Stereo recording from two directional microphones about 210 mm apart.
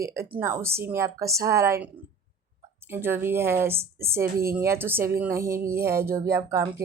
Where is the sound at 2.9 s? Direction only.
10° right (ahead or behind).